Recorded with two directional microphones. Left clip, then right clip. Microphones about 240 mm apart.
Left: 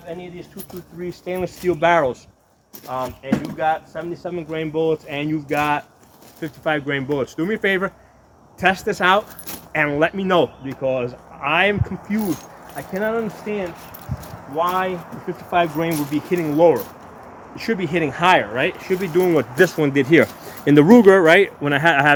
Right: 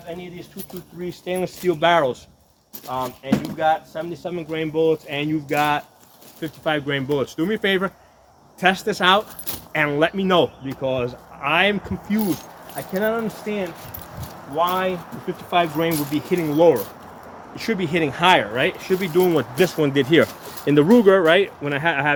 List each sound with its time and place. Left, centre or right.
0.1 s speech: centre
19.1 s speech: centre
20.7 s speech: left